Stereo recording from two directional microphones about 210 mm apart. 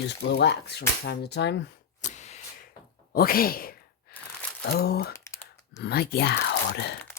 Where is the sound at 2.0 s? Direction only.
35° left (ahead or behind).